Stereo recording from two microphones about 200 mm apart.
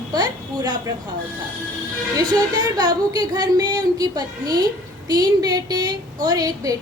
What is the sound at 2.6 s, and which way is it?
A woman's voice, 20° right (ahead or behind).